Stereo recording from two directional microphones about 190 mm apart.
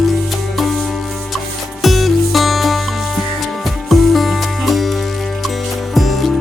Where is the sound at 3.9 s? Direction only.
Centre (ahead or behind).